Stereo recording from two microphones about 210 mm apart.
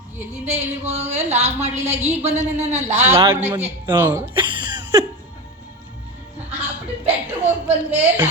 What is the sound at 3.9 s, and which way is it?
Speech, 10° right (ahead or behind).